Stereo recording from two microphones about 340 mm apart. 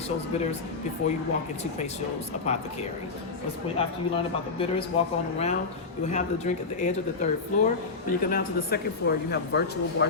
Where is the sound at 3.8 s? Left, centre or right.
Centre.